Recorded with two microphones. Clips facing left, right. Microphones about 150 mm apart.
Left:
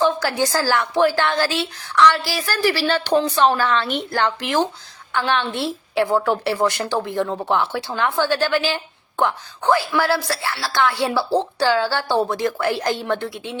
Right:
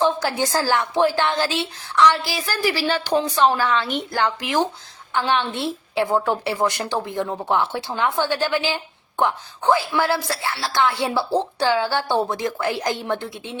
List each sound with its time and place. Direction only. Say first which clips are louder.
0.0 s a sound: left 1 dB; 20° right (ahead or behind)
0.5 s a woman's voice: left 1 dB; 20° right (ahead or behind)
5.1 s a woman's voice: even; 20° right (ahead or behind)